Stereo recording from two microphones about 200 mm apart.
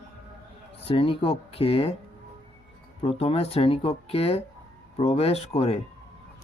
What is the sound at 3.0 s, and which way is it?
Speech, 30° left (ahead or behind).